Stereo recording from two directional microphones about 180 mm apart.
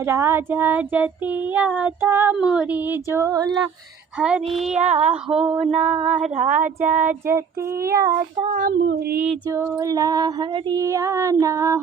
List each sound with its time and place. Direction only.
0.0 s child singing: 15° right (ahead or behind)
4.2 s speech: 5° right (ahead or behind)
4.8 s a sound: 40° right (ahead or behind)
5.3 s speech: 5° right (ahead or behind)
5.5 s a sound: 35° right (ahead or behind)
6.3 s speech: 45° right (ahead or behind)
8.5 s speech: 55° right (ahead or behind)
9.5 s female singing: 15° right (ahead or behind)